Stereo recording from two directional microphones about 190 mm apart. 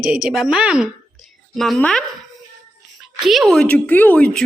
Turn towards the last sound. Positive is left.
turn(degrees=5)  # may be behind; listen again after turning